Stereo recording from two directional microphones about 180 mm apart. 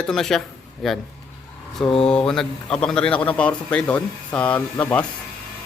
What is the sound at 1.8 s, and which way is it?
Mantra, 30° left (ahead or behind).